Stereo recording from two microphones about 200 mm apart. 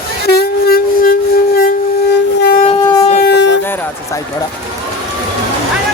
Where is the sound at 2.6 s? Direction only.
25° left (ahead or behind).